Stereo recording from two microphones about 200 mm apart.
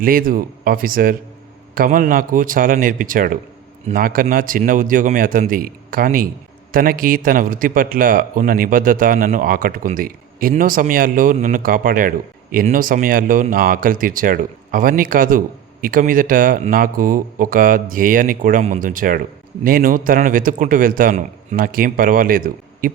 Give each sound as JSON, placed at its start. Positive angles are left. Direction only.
{"t": 0.0, "sound": "a man's voice", "side_deg": -45}